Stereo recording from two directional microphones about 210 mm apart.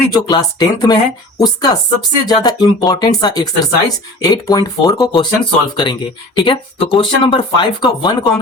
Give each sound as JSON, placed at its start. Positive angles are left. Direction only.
{"t": 0.1, "sound": "speech", "side_deg": 20}